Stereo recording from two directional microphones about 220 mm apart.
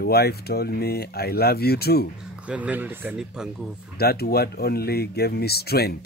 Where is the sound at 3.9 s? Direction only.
45° left (ahead or behind).